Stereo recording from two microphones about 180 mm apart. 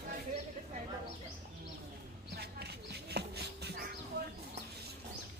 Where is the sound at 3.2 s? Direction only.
65° right (ahead or behind).